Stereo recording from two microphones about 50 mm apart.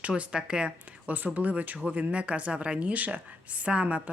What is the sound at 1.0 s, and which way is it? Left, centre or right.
Speech, right.